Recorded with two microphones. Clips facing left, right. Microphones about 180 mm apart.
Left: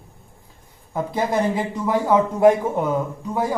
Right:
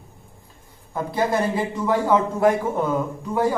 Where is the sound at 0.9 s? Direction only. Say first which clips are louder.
Even; 15° left (ahead or behind).